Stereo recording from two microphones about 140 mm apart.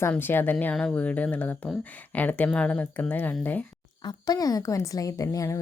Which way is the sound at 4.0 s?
30° left (ahead or behind).